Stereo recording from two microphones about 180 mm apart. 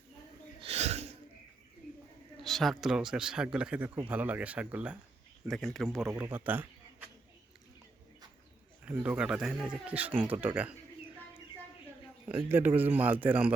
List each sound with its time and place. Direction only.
0.6 s snort: 35° right (ahead or behind)
2.4 s speech: centre (ahead or behind)
6.1 s speech: 15° right (ahead or behind)
8.8 s speech: 5° right (ahead or behind)
12.5 s speech: 10° right (ahead or behind)